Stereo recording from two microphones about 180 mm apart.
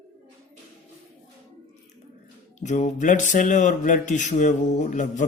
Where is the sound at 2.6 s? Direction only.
40° left (ahead or behind).